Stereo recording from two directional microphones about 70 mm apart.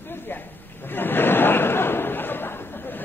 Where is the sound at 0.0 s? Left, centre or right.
Left.